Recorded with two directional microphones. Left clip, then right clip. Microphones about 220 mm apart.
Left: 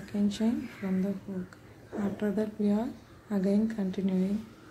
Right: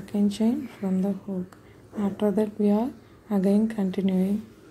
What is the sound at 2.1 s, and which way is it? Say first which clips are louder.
A woman's voice: right 8 dB; 15° right (ahead or behind).